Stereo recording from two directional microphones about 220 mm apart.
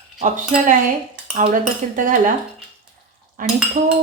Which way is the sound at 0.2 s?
35° right (ahead or behind).